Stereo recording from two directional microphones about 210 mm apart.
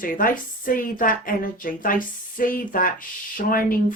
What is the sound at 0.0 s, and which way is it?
Speech, 40° left (ahead or behind).